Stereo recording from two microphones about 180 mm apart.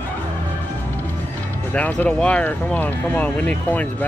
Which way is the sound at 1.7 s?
10° left (ahead or behind).